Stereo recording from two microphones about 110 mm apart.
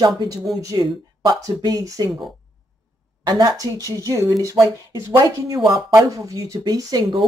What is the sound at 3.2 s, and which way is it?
Speech, 35° right (ahead or behind).